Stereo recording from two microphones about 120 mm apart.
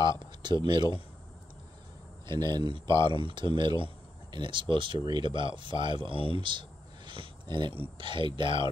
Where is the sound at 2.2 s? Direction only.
35° right (ahead or behind).